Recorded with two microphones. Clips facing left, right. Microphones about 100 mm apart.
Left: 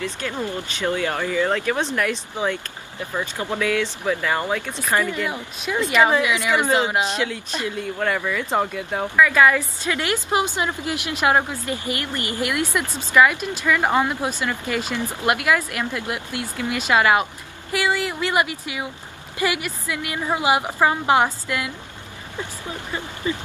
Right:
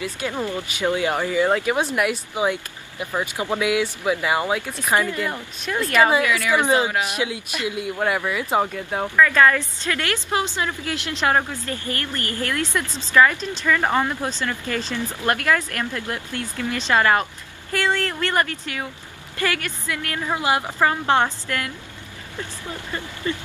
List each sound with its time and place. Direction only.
0.0 s speech: 15° right (ahead or behind)
5.3 s speech: 5° left (ahead or behind)
6.2 s speech: 20° left (ahead or behind)
6.6 s speech: 20° right (ahead or behind)
6.9 s speech: 25° left (ahead or behind)
7.2 s speech: 15° right (ahead or behind)
9.1 s a woman's voice: 10° left (ahead or behind)